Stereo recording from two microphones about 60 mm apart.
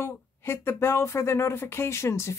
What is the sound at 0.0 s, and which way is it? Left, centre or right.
Speech, left.